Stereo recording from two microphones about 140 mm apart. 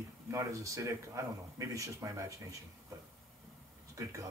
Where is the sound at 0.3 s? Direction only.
20° right (ahead or behind).